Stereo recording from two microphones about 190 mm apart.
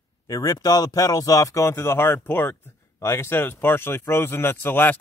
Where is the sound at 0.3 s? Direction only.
20° left (ahead or behind).